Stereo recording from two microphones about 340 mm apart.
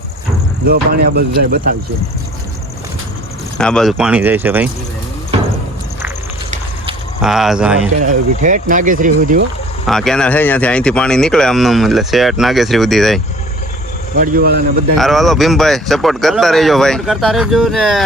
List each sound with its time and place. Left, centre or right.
0.7 s speech: right
3.6 s speech: centre
7.2 s speech: centre
8.0 s speech: right
9.8 s speech: centre
14.2 s speech: right
14.9 s speech: centre